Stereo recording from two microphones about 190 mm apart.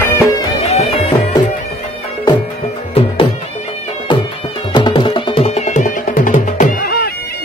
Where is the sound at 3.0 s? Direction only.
30° left (ahead or behind).